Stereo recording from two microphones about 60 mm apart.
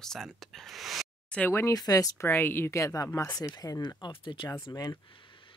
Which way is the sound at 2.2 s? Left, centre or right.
Left.